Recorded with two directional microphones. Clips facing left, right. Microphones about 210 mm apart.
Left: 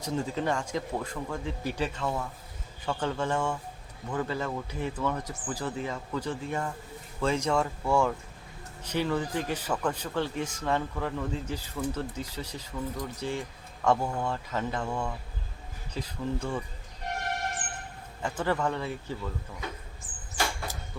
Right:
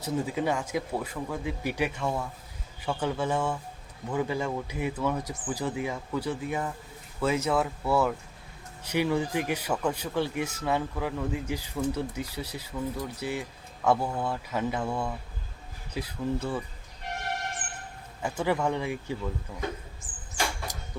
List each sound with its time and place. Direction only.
0.0 s speech: 10° right (ahead or behind)
18.2 s speech: 10° right (ahead or behind)
20.9 s a sound: 15° right (ahead or behind)